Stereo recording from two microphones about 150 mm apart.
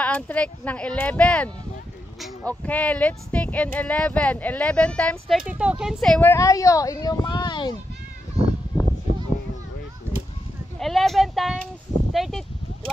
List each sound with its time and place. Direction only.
0.0 s speech: 10° left (ahead or behind)
5.5 s speech: 5° right (ahead or behind)
6.3 s speech: 20° left (ahead or behind)
8.7 s a sound: 30° left (ahead or behind)
10.8 s speech: centre (ahead or behind)